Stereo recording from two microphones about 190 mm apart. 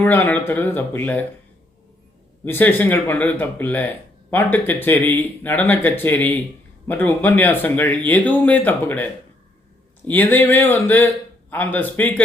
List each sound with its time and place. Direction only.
0.0 s speech: 10° left (ahead or behind)
2.4 s speech: 10° left (ahead or behind)
10.1 s speech: 10° left (ahead or behind)